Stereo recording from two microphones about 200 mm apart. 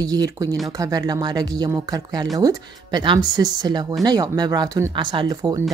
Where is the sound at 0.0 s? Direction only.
20° right (ahead or behind).